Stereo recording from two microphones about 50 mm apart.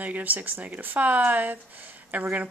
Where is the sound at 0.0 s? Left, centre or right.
Right.